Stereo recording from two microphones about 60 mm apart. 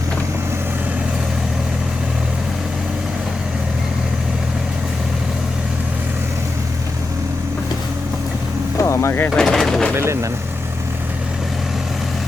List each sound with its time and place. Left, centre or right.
8.8 s vehicle: left
9.3 s speech: centre
9.9 s speech: right